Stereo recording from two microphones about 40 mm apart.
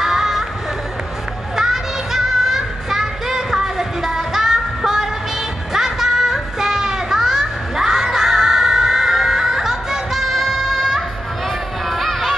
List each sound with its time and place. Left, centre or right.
0.0 s music: centre
1.6 s music: centre
10.2 s music: centre